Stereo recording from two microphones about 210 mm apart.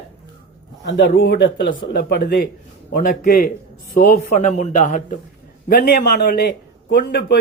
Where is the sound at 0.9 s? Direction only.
55° left (ahead or behind).